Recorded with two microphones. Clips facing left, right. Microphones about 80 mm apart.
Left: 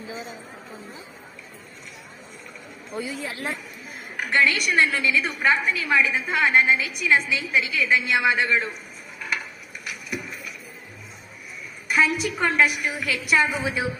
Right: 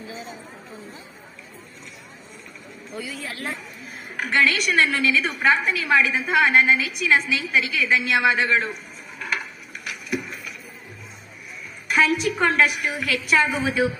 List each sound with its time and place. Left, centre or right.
2.9 s speech: left
4.2 s a woman's voice: centre
11.9 s a woman's voice: centre